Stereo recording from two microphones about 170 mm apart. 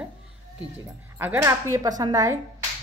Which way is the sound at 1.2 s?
10° right (ahead or behind).